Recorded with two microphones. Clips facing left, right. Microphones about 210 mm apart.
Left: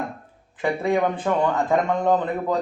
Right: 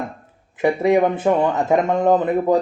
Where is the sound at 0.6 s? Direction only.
20° right (ahead or behind).